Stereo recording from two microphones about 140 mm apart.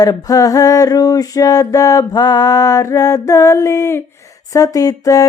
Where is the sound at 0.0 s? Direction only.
25° left (ahead or behind).